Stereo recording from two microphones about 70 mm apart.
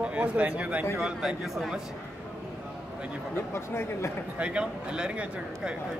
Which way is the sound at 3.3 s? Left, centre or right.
Left.